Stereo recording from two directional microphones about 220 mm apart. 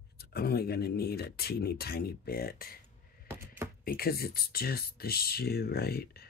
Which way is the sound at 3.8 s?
45° left (ahead or behind).